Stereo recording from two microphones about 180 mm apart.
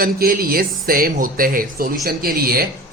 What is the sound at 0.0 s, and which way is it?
Speech, 55° right (ahead or behind).